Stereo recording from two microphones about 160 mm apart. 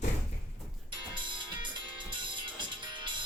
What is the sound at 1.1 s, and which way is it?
Music, 30° right (ahead or behind).